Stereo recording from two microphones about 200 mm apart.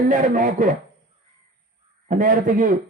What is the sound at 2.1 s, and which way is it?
Speech, 40° right (ahead or behind).